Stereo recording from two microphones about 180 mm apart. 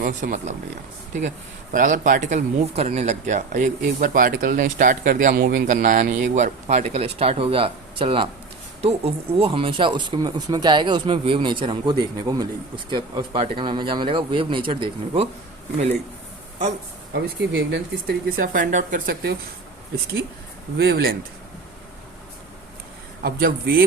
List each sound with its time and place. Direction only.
0.0 s speech: 45° right (ahead or behind)
1.7 s speech: 45° right (ahead or behind); by 15.3 s 30° right (ahead or behind)
17.5 s speech: 70° right (ahead or behind)
20.7 s speech: 60° right (ahead or behind)
23.2 s speech: 55° right (ahead or behind)